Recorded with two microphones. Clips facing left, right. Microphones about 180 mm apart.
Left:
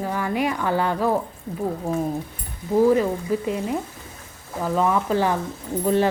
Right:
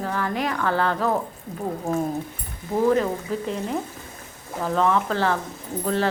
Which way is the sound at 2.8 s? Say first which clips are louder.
Left 1 dB; 10° left (ahead or behind).